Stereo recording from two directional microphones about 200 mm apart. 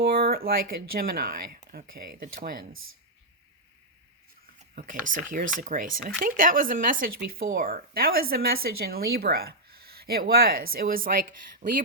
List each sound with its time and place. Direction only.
0.0 s speech: 50° right (ahead or behind)
4.7 s speech: 40° right (ahead or behind)